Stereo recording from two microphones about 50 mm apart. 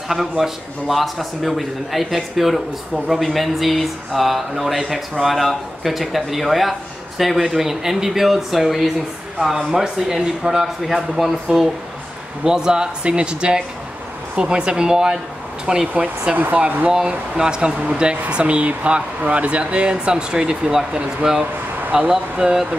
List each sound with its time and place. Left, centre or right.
0.1 s speech: centre
10.9 s speech: centre
12.4 s speech: centre
15.9 s speech: right
16.9 s speech: centre